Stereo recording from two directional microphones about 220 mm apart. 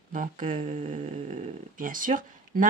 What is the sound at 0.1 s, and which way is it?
A woman's voice, 35° right (ahead or behind).